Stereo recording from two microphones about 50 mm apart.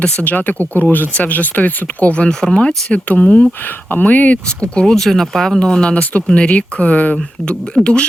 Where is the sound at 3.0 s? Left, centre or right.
Left.